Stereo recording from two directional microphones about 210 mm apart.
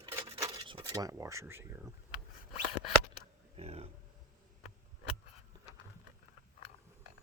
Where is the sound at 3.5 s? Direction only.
30° right (ahead or behind).